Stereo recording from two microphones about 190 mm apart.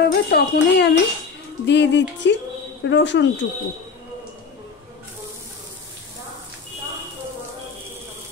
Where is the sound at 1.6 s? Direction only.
70° left (ahead or behind).